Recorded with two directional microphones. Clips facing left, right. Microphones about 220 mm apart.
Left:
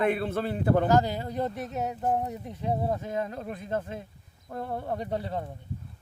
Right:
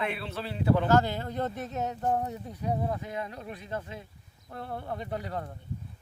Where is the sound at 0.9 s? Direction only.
15° left (ahead or behind).